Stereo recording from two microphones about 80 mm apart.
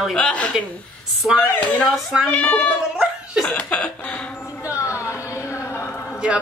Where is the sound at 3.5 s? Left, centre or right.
Centre.